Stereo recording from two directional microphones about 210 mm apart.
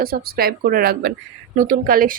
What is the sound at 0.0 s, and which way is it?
Speech, 45° right (ahead or behind).